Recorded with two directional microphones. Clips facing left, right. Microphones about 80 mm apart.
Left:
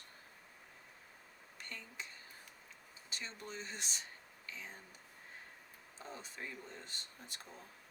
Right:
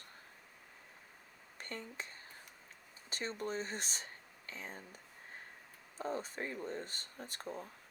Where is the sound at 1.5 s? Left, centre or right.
Right.